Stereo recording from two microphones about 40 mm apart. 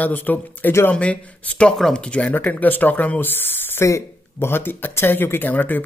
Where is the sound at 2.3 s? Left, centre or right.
Left.